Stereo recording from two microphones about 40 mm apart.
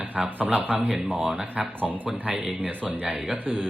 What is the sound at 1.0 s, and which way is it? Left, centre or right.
Speech, right.